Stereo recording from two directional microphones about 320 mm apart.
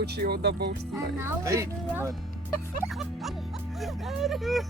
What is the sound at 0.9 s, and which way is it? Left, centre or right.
Speech, centre.